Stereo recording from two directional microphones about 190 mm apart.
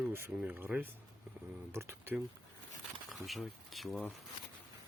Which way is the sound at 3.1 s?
Centre (ahead or behind).